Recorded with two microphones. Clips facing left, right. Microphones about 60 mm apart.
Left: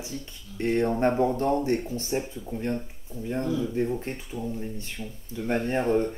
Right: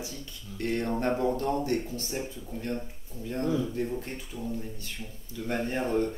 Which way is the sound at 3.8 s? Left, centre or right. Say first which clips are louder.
Left 4 dB; left.